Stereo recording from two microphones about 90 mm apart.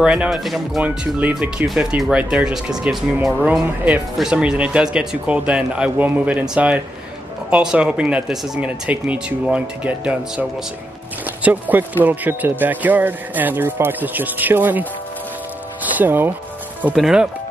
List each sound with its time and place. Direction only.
0.0 s speech: 10° right (ahead or behind)
0.8 s speech: 15° right (ahead or behind)
3.6 s speech: 15° right (ahead or behind)
11.4 s speech: 15° right (ahead or behind)
16.9 s speech: 5° right (ahead or behind)